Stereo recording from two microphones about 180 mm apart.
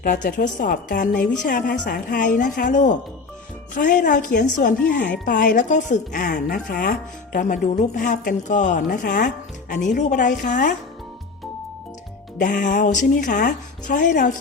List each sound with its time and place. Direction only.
0.0 s speech: 50° left (ahead or behind)
12.4 s speech: 45° left (ahead or behind)